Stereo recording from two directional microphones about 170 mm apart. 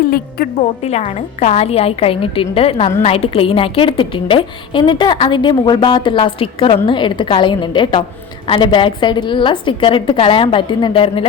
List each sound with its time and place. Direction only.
0.8 s a woman's voice: 40° left (ahead or behind)